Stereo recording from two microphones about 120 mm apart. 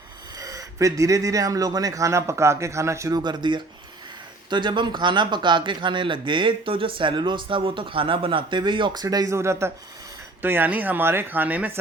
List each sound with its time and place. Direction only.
0.3 s speech: 30° right (ahead or behind); by 11.8 s 15° right (ahead or behind)